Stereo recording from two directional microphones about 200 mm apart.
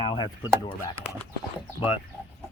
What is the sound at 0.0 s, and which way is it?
Speech, 20° left (ahead or behind).